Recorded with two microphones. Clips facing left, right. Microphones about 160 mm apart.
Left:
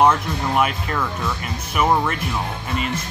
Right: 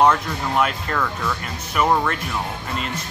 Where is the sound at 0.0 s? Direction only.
10° left (ahead or behind).